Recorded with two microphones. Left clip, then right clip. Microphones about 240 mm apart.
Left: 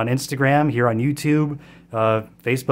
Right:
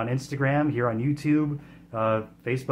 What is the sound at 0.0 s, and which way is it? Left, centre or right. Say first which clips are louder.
Speech: left 7 dB; left.